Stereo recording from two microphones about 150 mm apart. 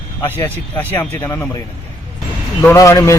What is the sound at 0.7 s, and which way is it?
Speech, 15° left (ahead or behind).